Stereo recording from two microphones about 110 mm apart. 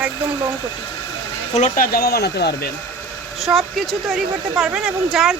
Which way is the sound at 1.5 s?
90° left.